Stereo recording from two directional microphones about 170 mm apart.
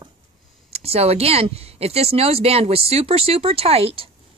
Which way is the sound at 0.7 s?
40° right (ahead or behind).